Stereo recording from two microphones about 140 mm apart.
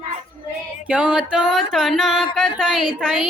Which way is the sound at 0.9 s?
5° right (ahead or behind).